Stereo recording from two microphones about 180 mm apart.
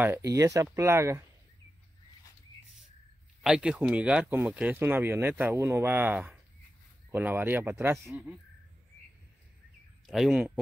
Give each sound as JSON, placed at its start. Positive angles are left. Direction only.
{"t": 0.3, "sound": "speech", "side_deg": -20}
{"t": 3.4, "sound": "speech", "side_deg": -5}
{"t": 10.0, "sound": "speech", "side_deg": 0}